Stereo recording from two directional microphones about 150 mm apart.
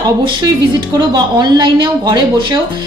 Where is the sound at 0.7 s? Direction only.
30° right (ahead or behind).